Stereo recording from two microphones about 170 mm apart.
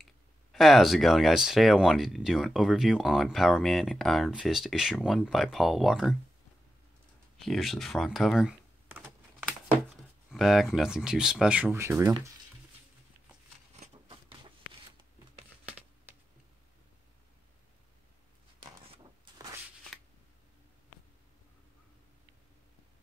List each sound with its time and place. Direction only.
0.0 s speech: centre (ahead or behind)
7.3 s typing: centre (ahead or behind)
10.3 s speech: centre (ahead or behind)
13.7 s a sound: 30° right (ahead or behind)